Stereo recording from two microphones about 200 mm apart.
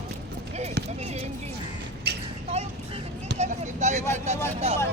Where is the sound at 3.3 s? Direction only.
35° right (ahead or behind).